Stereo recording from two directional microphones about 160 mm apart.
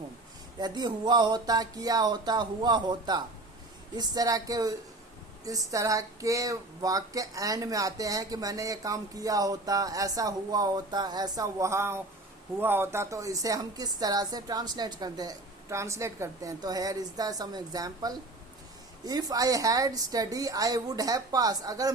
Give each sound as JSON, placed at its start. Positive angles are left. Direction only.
{"t": 0.6, "sound": "speech", "side_deg": -25}